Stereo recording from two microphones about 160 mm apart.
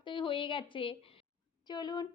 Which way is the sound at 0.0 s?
30° left (ahead or behind).